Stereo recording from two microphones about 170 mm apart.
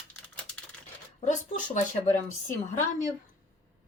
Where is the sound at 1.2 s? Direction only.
45° left (ahead or behind).